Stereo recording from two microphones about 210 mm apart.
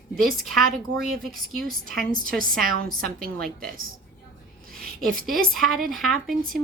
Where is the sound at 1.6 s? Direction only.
40° right (ahead or behind).